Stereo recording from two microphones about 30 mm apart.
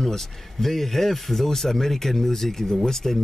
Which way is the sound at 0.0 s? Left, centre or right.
Centre.